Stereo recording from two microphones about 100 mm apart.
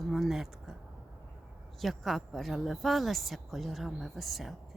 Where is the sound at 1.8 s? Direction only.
Centre (ahead or behind).